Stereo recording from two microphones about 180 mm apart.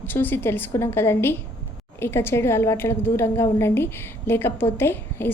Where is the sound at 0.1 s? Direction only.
10° left (ahead or behind).